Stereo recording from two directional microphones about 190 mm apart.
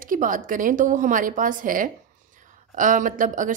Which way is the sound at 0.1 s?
45° right (ahead or behind).